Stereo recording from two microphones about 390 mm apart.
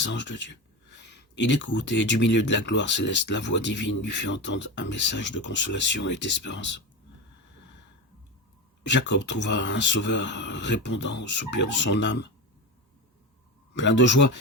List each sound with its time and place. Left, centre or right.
0.0 s speech: left
8.9 s speech: left
13.7 s speech: left